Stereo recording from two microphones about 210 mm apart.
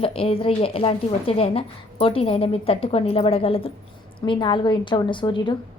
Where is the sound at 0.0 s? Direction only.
25° left (ahead or behind).